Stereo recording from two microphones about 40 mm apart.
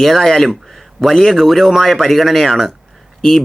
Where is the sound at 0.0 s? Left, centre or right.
Centre.